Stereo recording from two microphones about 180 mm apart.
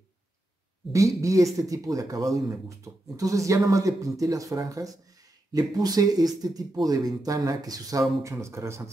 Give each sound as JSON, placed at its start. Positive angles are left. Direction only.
{"t": 0.9, "sound": "speech", "side_deg": -20}